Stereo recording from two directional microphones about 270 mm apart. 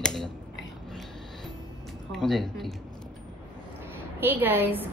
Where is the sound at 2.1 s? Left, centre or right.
Centre.